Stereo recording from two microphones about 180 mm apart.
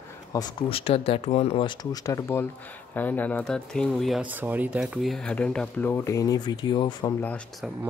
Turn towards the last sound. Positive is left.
turn(degrees=5)  # may be behind; listen again after turning